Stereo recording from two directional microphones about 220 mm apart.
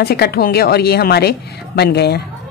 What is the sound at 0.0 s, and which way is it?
A woman's voice, 45° left (ahead or behind).